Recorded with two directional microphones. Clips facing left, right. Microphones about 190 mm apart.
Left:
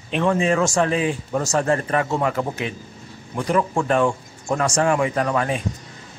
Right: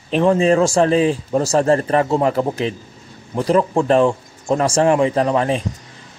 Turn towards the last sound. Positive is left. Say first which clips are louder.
# right 5 dB
turn(degrees=-30)  # may be behind; listen again after turning